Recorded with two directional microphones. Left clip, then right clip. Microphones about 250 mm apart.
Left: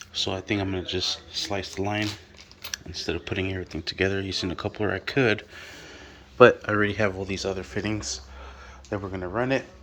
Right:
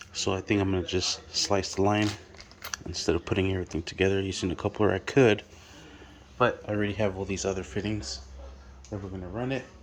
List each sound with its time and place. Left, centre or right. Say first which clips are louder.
0.0 s speech: left 2 dB; centre
6.7 s speech: left 5 dB; centre
9.1 s speech: left 7 dB; centre